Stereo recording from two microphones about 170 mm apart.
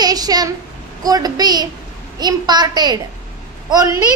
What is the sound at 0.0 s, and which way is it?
A child's voice, 20° right (ahead or behind).